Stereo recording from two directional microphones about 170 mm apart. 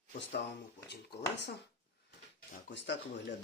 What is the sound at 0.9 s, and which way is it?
Speech, 80° left.